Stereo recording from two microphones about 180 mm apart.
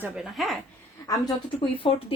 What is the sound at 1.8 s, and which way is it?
Speech, 30° left (ahead or behind).